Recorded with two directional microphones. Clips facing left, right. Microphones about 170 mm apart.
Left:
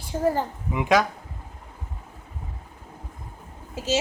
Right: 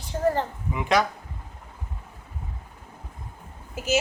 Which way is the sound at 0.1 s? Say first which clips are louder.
Even; 10° left (ahead or behind).